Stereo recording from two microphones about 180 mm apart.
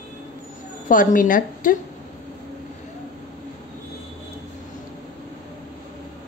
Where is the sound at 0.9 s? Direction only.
50° left (ahead or behind).